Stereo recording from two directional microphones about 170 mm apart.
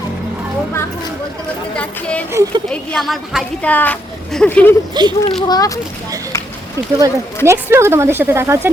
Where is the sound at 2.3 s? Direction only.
15° right (ahead or behind).